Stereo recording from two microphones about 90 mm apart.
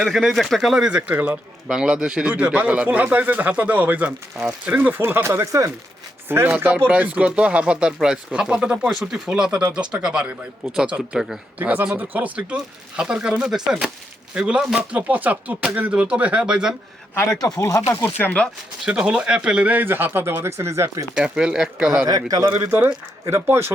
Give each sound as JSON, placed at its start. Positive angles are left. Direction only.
{"t": 0.0, "sound": "speech", "side_deg": 0}
{"t": 6.2, "sound": "speech", "side_deg": -25}
{"t": 17.4, "sound": "speech", "side_deg": 35}
{"t": 18.0, "sound": "speech", "side_deg": 20}
{"t": 18.9, "sound": "speech", "side_deg": -15}
{"t": 21.2, "sound": "speech", "side_deg": -10}
{"t": 22.0, "sound": "a man's voice", "side_deg": -45}
{"t": 22.5, "sound": "speech", "side_deg": -30}